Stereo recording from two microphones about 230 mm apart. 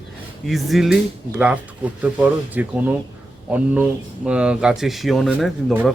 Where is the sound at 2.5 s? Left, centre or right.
Centre.